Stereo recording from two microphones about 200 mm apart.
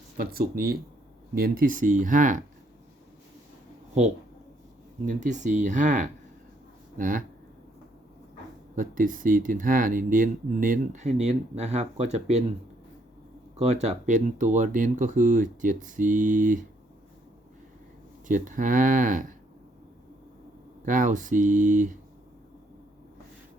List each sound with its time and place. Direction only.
0.2 s speech: 50° right (ahead or behind)
5.0 s speech: 40° right (ahead or behind)
8.7 s speech: 40° right (ahead or behind)
13.8 s speech: 35° right (ahead or behind)
18.3 s speech: 40° right (ahead or behind)
20.8 s speech: 40° right (ahead or behind)